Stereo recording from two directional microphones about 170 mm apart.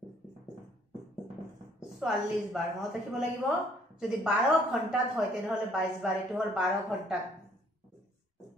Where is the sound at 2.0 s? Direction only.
5° right (ahead or behind).